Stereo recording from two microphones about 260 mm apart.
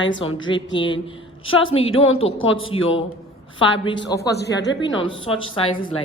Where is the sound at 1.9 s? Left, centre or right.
Left.